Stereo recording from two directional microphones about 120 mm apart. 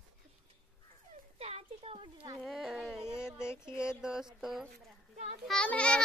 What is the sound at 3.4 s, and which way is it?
Speech, 5° right (ahead or behind).